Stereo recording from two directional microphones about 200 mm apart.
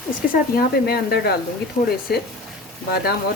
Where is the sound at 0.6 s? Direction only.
50° left (ahead or behind).